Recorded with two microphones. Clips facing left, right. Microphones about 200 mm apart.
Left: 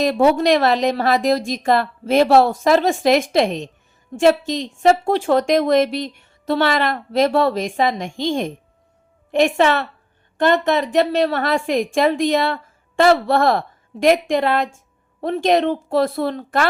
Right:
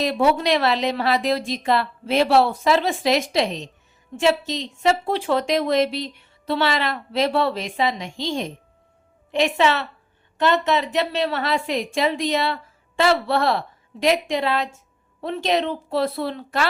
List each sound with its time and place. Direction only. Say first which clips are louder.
0.0 s a woman's voice: left 4 dB; 45° left (ahead or behind)